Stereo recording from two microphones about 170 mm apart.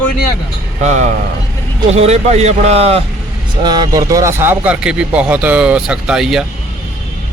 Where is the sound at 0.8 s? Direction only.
45° right (ahead or behind).